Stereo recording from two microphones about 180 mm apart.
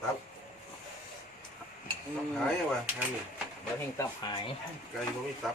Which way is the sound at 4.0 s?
25° left (ahead or behind).